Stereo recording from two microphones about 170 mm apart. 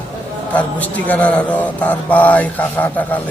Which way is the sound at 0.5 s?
10° left (ahead or behind).